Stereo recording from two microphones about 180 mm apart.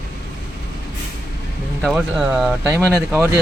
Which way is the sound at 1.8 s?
Centre (ahead or behind).